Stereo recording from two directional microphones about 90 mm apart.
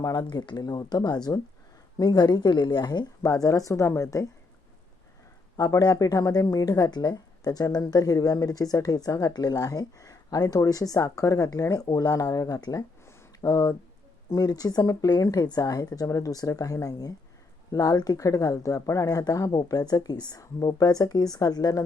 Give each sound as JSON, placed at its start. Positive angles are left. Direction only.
{"t": 0.0, "sound": "speech", "side_deg": 50}
{"t": 5.5, "sound": "speech", "side_deg": 40}